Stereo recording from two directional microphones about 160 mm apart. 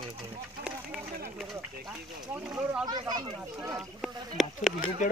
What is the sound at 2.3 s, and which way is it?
Speech, 5° right (ahead or behind).